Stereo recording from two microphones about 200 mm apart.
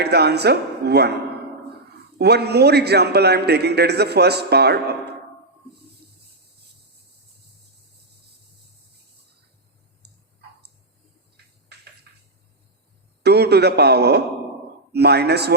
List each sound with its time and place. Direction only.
0.0 s a man's voice: 55° right (ahead or behind)
2.1 s a man's voice: 55° right (ahead or behind)
13.2 s a man's voice: 55° right (ahead or behind)